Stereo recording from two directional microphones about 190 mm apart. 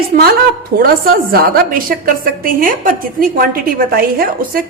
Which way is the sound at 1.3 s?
50° right (ahead or behind).